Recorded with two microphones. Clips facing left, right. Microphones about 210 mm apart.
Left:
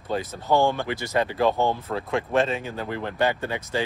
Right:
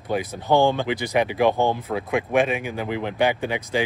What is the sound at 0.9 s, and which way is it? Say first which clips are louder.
Speech: right 3 dB; 15° right (ahead or behind).